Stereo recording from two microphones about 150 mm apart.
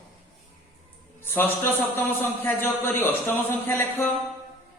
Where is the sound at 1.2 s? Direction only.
15° left (ahead or behind).